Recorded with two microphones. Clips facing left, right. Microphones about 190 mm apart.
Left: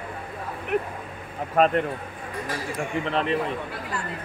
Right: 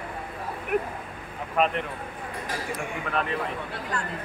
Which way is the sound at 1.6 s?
40° left (ahead or behind).